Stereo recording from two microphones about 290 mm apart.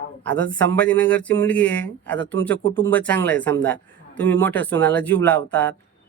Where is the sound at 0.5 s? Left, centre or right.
Centre.